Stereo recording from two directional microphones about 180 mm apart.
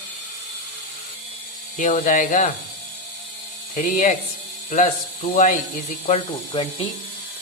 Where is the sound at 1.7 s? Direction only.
45° left (ahead or behind).